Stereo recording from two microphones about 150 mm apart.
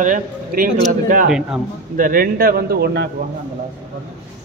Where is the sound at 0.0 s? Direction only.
60° right (ahead or behind).